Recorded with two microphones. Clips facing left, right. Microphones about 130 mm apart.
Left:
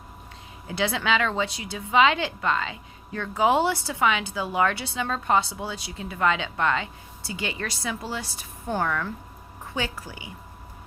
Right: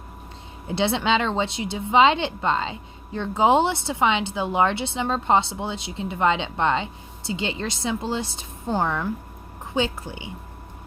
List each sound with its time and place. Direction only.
0.7 s a woman's voice: 25° right (ahead or behind)